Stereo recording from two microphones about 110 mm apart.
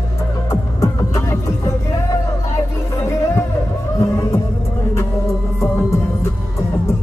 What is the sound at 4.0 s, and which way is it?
Music, 30° left (ahead or behind).